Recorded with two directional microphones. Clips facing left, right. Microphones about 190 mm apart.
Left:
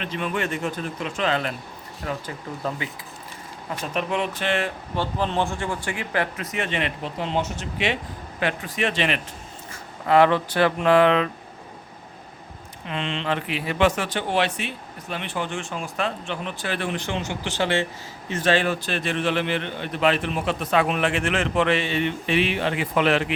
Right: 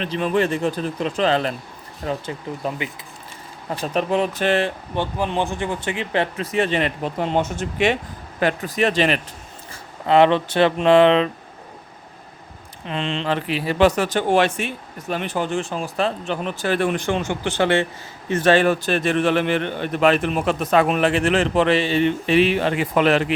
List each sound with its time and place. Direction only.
0.0 s speech: 35° right (ahead or behind)
2.0 s speech: 20° right (ahead or behind)
3.8 s speech: 35° right (ahead or behind)
4.9 s speech: 15° right (ahead or behind); by 9.2 s 40° right (ahead or behind)
10.1 s speech: 25° right (ahead or behind)
12.9 s a man's voice: 35° right (ahead or behind)